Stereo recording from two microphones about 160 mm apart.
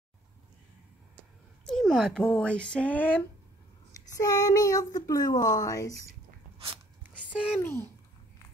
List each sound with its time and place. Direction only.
1.7 s speech: centre (ahead or behind)
4.1 s speech: 25° left (ahead or behind)
7.6 s a child's voice: 15° left (ahead or behind)